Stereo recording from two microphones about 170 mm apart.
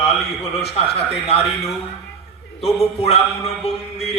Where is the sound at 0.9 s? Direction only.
35° left (ahead or behind).